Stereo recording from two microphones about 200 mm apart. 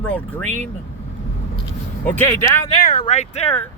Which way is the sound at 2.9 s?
35° left (ahead or behind).